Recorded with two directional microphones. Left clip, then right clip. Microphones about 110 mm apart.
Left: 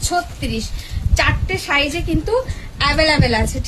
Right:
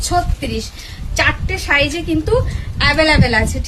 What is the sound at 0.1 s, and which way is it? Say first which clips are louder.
A woman's voice: right 3 dB; 25° right (ahead or behind).